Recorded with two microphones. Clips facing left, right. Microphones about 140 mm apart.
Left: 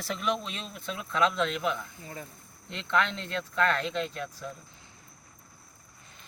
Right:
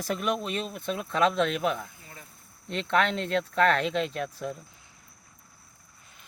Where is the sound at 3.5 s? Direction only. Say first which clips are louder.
Right 3 dB; 65° right (ahead or behind).